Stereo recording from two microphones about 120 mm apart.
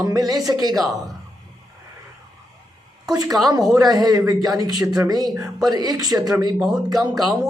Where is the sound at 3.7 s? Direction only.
30° right (ahead or behind).